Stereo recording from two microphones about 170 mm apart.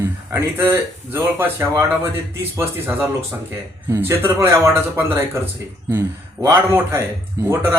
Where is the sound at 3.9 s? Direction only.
15° right (ahead or behind).